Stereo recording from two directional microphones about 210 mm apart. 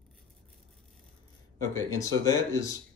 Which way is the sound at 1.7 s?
15° left (ahead or behind).